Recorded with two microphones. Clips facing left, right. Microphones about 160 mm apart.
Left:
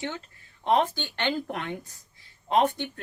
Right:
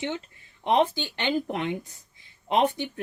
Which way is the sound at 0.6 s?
20° right (ahead or behind).